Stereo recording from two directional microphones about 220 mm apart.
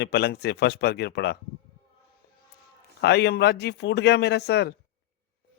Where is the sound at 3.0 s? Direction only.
50° left (ahead or behind).